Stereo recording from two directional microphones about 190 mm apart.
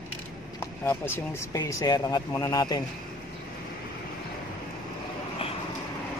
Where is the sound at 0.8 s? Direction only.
10° left (ahead or behind).